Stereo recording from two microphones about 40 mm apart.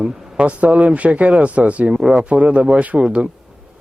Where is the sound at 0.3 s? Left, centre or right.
Right.